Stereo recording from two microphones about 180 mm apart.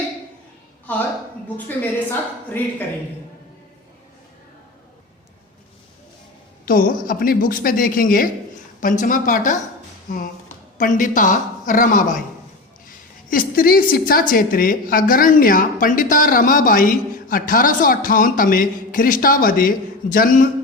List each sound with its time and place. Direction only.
0.9 s a woman's voice: 10° left (ahead or behind)
6.7 s a woman's voice: 50° left (ahead or behind)
10.8 s a woman's voice: 45° left (ahead or behind)
13.3 s a woman's voice: 55° left (ahead or behind)